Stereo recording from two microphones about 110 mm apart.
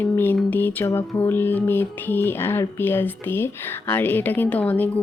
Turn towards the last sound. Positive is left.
turn(degrees=15)  # may be behind; listen again after turning